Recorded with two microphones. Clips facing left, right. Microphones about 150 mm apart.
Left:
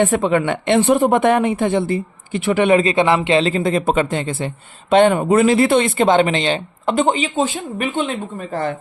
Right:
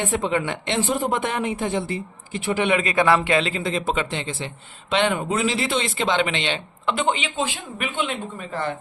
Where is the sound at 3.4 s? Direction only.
40° left (ahead or behind).